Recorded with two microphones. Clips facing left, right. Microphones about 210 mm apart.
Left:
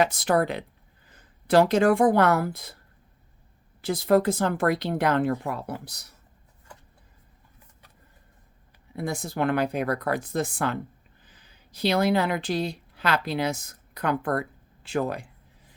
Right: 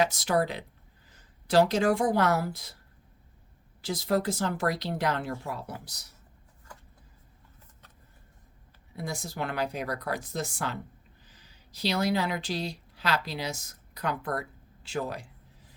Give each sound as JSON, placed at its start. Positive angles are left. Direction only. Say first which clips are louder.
{"t": 0.0, "sound": "speech", "louder": "left 3 dB", "side_deg": 55}
{"t": 3.8, "sound": "speech", "louder": "left 7 dB", "side_deg": 55}
{"t": 9.0, "sound": "a woman's voice", "louder": "left 7 dB", "side_deg": 55}